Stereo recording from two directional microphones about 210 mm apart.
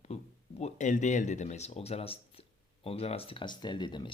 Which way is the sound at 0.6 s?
35° left (ahead or behind).